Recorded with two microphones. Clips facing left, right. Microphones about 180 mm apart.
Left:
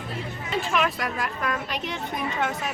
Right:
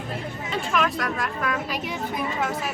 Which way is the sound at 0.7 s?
Centre (ahead or behind).